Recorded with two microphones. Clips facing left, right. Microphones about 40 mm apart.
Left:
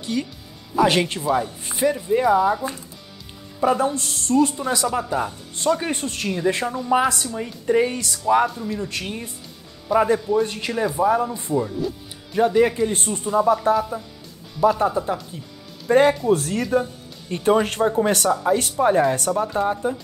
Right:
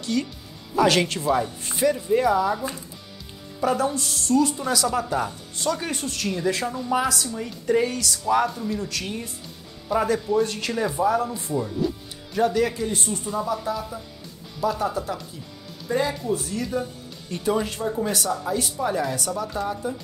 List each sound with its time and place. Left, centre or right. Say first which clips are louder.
0.0 s speech: even; centre
1.2 s speech: left 1 dB; centre
1.6 s speech: left 1 dB; centre
3.9 s speech: left 1 dB; left
8.5 s speech: left 1 dB; centre
8.8 s speech: left 1 dB; left
11.8 s speech: right 1 dB; centre
12.4 s speech: left 4 dB; left
12.9 s speech: left 6 dB; left
14.9 s speech: left 5 dB; left
15.9 s speech: left 8 dB; left
17.3 s speech: left 6 dB; left
18.3 s speech: left 6 dB; left
19.4 s speech: left 6 dB; left